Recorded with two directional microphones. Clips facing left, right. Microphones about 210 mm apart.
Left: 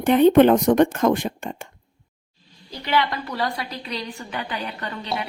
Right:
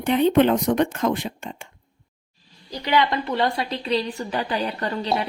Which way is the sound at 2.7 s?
15° right (ahead or behind).